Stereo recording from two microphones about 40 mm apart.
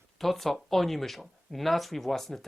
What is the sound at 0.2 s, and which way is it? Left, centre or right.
Speech, centre.